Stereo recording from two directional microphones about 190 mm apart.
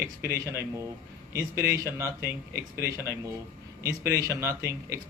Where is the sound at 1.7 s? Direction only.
15° right (ahead or behind).